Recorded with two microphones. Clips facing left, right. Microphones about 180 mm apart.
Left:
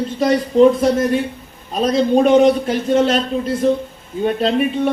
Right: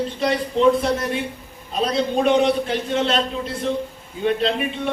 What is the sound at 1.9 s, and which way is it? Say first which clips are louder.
A man's voice: left 6 dB; 45° left (ahead or behind).